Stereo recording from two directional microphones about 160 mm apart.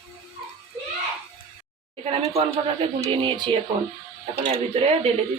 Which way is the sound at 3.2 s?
30° right (ahead or behind).